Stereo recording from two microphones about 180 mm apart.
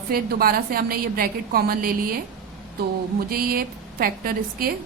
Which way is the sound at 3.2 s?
55° right (ahead or behind).